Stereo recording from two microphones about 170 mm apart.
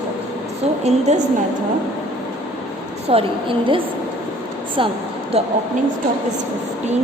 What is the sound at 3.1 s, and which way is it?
Speech, 30° right (ahead or behind).